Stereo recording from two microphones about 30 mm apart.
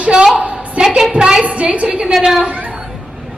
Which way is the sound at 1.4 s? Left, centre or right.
Right.